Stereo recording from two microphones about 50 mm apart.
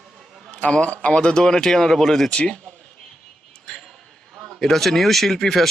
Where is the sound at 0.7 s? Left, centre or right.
Left; by 2.3 s centre.